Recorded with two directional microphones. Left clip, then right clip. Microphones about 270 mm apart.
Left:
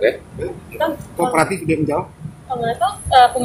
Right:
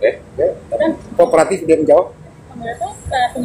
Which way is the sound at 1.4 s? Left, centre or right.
Centre.